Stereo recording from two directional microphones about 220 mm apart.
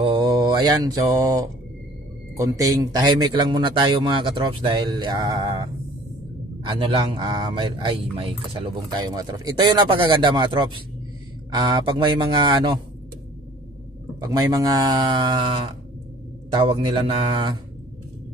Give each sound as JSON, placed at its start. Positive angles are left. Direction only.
{"t": 0.0, "sound": "mantra", "side_deg": -20}
{"t": 2.3, "sound": "speech", "side_deg": -15}
{"t": 6.7, "sound": "speech", "side_deg": -25}
{"t": 14.2, "sound": "speech", "side_deg": -15}